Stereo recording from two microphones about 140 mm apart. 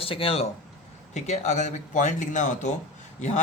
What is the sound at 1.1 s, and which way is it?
Speech, 55° left (ahead or behind).